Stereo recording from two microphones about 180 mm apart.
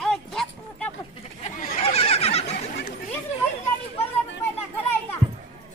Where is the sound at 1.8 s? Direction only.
35° left (ahead or behind).